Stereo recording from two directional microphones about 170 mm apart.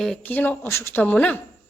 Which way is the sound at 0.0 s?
5° left (ahead or behind).